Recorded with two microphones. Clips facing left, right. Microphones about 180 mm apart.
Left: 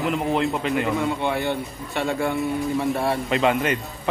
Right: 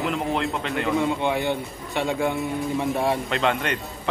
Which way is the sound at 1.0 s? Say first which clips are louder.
Right 1 dB; 15° right (ahead or behind).